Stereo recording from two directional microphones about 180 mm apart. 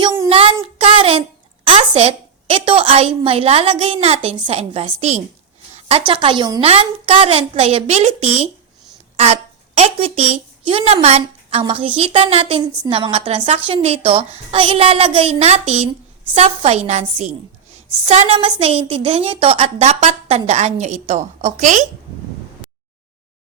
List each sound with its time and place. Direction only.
0.0 s child singing: 30° right (ahead or behind)
0.6 s a sound: 30° right (ahead or behind)
1.6 s a woman's voice: 30° right (ahead or behind)
6.1 s a woman's voice: 25° right (ahead or behind); by 21.8 s 45° right (ahead or behind)